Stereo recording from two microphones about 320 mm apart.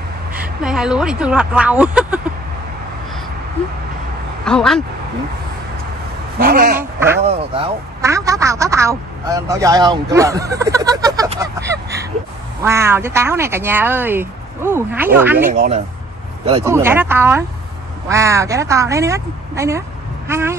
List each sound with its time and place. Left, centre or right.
0.3 s a woman's voice: centre
4.5 s a woman's voice: centre
6.3 s speech: right
6.8 s a man's voice: centre
15.5 s speech: right
16.6 s speech: centre